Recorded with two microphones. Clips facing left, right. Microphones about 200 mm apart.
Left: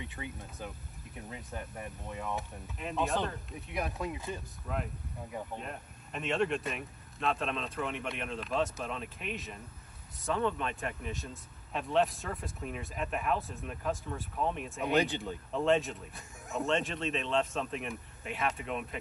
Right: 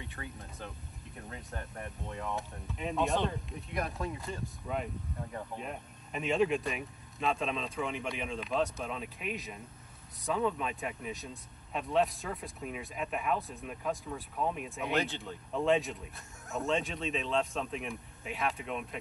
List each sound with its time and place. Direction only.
0.0 s speech: 20° left (ahead or behind)
1.1 s speech: 5° left (ahead or behind)